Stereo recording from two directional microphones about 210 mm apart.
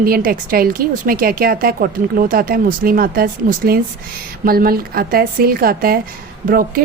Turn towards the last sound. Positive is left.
turn(degrees=-45)  # may be behind; listen again after turning